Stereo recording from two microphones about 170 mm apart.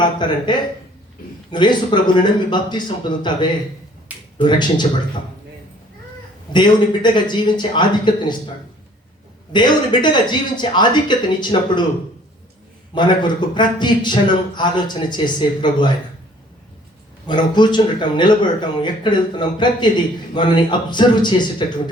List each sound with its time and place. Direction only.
0.0 s speech: 25° left (ahead or behind)
6.5 s speech: 25° left (ahead or behind)
9.5 s speech: 25° left (ahead or behind)
12.9 s speech: 25° left (ahead or behind)
17.2 s speech: 25° left (ahead or behind)